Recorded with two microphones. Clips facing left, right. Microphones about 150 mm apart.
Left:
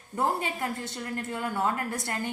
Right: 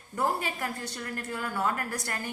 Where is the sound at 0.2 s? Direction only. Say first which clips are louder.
Left 1 dB; 25° left (ahead or behind).